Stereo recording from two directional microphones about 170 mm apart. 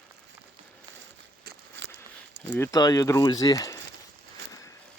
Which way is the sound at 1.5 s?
90° right.